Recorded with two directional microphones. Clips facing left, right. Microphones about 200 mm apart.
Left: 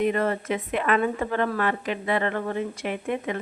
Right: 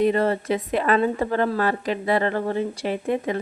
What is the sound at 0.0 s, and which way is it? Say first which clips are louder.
Speech: right 4 dB; 30° right (ahead or behind).